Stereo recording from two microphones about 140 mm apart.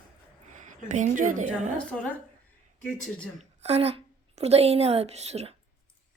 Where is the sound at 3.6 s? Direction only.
45° right (ahead or behind).